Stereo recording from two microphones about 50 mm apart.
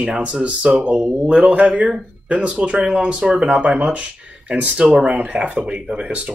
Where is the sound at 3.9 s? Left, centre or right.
Right.